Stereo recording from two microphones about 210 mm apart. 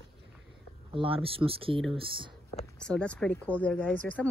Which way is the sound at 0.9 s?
25° right (ahead or behind).